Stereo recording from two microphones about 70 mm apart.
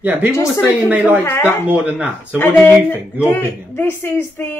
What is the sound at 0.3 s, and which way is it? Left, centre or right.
Speech, left.